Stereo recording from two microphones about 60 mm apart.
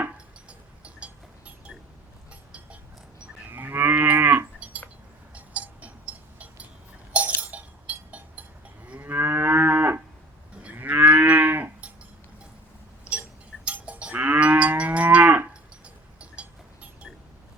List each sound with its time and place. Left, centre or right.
0.4 s a sound: centre
3.5 s cattle: right
5.3 s cowbell: right
7.1 s chink: right
9.0 s moo: right
13.7 s livestock: right